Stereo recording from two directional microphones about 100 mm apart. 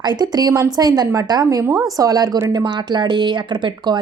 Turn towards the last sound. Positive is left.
turn(degrees=-50)  # may be behind; listen again after turning